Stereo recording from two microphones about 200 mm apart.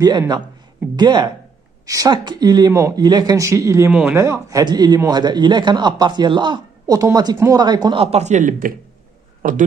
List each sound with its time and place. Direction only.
0.0 s a man's voice: 20° right (ahead or behind); by 9.7 s 40° right (ahead or behind)